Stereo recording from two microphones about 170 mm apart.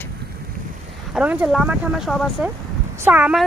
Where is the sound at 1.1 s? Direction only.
10° right (ahead or behind).